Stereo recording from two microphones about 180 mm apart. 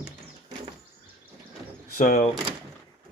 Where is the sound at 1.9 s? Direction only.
40° left (ahead or behind).